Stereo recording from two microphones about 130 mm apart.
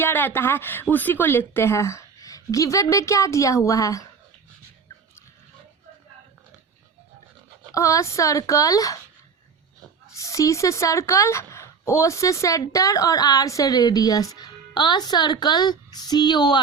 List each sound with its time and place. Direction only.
0.0 s a woman's voice: 15° left (ahead or behind)
7.7 s a woman's voice: 25° left (ahead or behind)
10.2 s a woman's voice: 25° left (ahead or behind)